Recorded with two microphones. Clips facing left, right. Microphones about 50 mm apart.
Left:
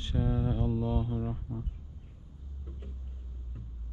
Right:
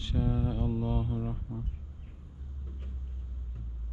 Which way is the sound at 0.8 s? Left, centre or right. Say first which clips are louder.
Left 1 dB; right.